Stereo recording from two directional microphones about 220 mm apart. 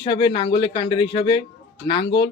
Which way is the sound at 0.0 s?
20° left (ahead or behind).